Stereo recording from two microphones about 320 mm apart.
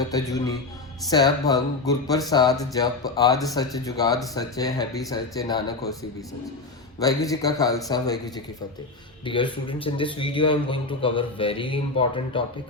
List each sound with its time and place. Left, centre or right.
0.1 s a man's voice: centre
7.0 s a man's voice: centre